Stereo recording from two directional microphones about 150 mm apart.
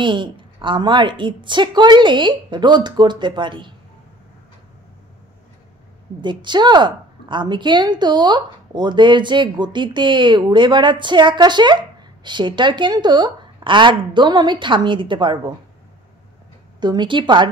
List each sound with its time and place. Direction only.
0.0 s a woman's voice: 30° right (ahead or behind)
6.2 s a woman's voice: 30° right (ahead or behind)
16.8 s a woman's voice: 30° right (ahead or behind)